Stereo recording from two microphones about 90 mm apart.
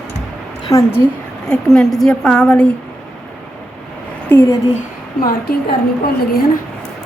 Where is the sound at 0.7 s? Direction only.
35° left (ahead or behind).